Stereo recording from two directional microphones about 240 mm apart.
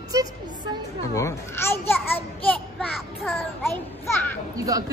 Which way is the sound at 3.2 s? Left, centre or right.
Centre.